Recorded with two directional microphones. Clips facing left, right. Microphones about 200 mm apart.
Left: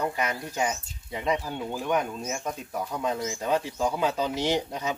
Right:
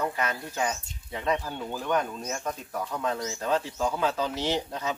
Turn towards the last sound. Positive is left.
turn(degrees=15)  # may be behind; listen again after turning